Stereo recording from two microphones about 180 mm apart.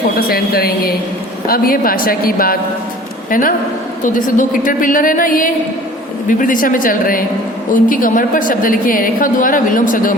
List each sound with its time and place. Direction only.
0.2 s a woman's voice: 60° left (ahead or behind)